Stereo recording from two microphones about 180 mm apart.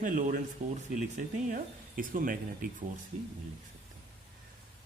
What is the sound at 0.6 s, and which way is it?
Speech, 40° right (ahead or behind).